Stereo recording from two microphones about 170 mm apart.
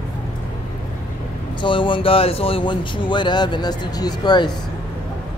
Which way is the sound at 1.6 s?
30° left (ahead or behind).